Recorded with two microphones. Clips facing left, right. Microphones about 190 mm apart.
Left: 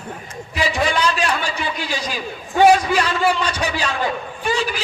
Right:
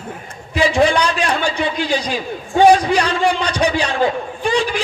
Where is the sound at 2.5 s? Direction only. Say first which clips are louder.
Right 2 dB; 35° right (ahead or behind).